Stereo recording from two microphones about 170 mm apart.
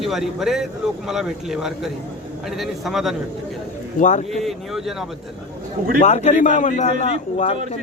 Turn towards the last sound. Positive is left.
turn(degrees=35)  # may be behind; listen again after turning